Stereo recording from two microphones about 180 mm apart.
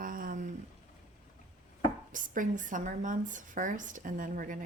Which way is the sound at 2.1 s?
45° right (ahead or behind).